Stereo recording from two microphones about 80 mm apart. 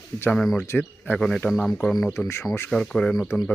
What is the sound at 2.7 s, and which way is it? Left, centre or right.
Speech, centre.